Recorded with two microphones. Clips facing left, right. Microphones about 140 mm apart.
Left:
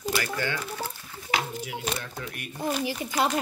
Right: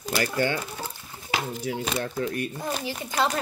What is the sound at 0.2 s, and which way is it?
Speech, 30° right (ahead or behind).